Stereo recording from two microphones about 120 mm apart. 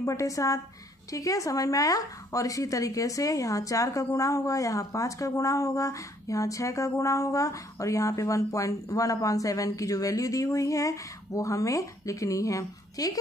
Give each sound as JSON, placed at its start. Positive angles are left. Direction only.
{"t": 0.0, "sound": "speech", "side_deg": 25}